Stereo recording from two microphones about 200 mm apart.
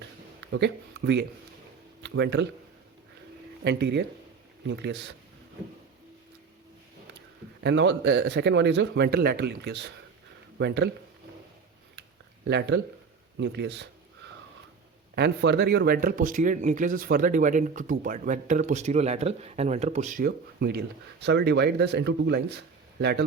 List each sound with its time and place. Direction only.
0.5 s speech: 60° right (ahead or behind)
3.6 s speech: 60° right (ahead or behind)
7.6 s speech: 60° right (ahead or behind)
12.5 s speech: 60° right (ahead or behind)
15.1 s speech: 55° right (ahead or behind)